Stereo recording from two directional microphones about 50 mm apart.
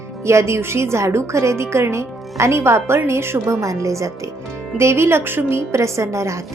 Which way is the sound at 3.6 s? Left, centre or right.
Right.